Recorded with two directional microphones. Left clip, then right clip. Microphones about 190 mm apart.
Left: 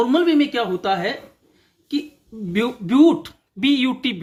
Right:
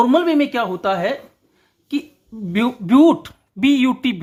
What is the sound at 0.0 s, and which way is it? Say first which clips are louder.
Speech: right 2 dB; 40° right (ahead or behind).